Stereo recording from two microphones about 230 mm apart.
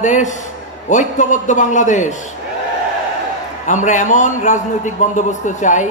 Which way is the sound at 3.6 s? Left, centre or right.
Left.